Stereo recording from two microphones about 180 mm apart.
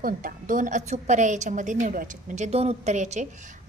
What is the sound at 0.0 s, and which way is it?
A woman's voice, 50° right (ahead or behind).